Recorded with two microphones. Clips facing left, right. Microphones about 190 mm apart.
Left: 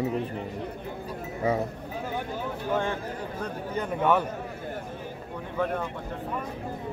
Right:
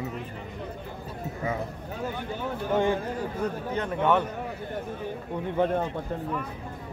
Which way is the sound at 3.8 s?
5° left (ahead or behind).